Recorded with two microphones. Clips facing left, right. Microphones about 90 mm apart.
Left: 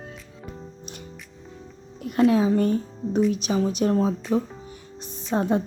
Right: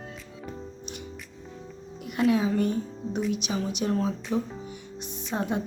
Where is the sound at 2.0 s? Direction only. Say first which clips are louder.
Left 5 dB; 40° left (ahead or behind).